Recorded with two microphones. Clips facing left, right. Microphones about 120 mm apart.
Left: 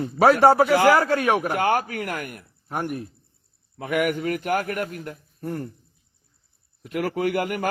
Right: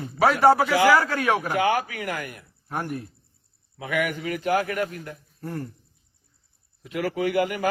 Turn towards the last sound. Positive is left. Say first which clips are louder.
# even
turn(degrees=55)  # may be behind; listen again after turning